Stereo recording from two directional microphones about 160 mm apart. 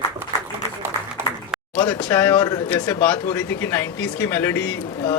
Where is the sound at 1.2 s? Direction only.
15° right (ahead or behind).